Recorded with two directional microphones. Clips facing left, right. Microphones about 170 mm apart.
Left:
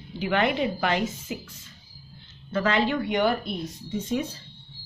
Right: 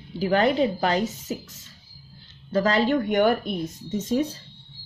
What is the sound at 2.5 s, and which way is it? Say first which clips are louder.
A woman's voice: right 3 dB; 40° right (ahead or behind).